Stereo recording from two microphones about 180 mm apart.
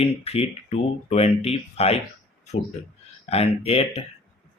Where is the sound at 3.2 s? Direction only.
35° left (ahead or behind).